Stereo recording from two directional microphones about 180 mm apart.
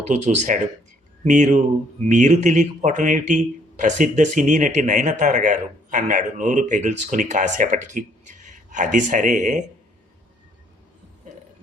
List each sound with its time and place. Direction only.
0.0 s a man's voice: 40° right (ahead or behind)